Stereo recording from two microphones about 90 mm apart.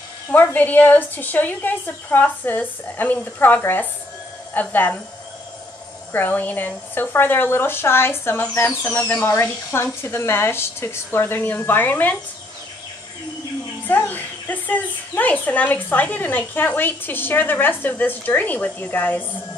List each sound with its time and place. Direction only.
0.3 s a woman's voice: 20° left (ahead or behind)
6.1 s a woman's voice: 20° left (ahead or behind)
13.8 s a woman's voice: 20° left (ahead or behind)